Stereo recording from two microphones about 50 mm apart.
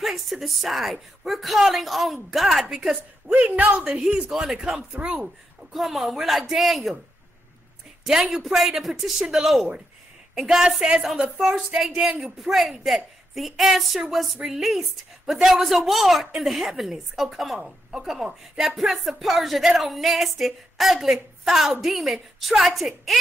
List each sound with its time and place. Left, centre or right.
0.0 s speech: centre
3.3 s speech: right
4.2 s speech: centre
8.0 s speech: centre